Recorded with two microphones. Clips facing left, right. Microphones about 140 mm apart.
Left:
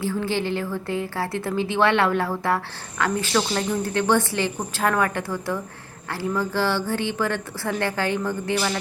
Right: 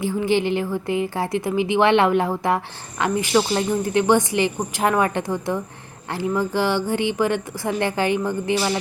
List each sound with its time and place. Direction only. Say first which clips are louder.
0.0 s speech: right 4 dB; 15° right (ahead or behind)